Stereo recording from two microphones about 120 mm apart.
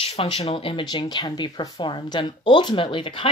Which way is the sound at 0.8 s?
35° left (ahead or behind).